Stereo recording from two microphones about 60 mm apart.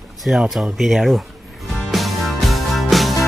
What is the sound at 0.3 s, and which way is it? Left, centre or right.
Speech, right.